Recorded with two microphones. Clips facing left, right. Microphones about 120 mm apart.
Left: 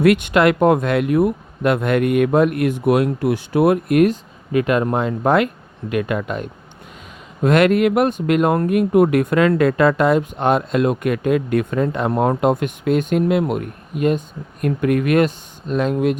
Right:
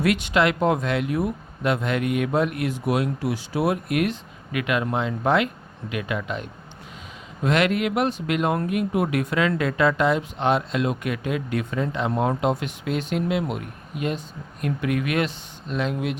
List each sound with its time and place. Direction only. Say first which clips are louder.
0.0 s speech: left 7 dB; 55° left (ahead or behind)